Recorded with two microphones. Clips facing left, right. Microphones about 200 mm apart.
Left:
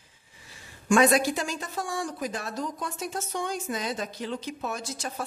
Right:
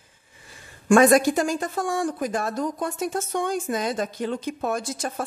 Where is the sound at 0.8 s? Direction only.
50° right (ahead or behind).